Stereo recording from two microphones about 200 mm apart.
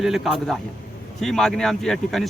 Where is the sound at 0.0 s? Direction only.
Centre (ahead or behind).